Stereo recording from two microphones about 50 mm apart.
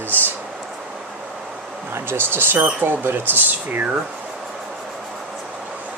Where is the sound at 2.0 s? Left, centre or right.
Right.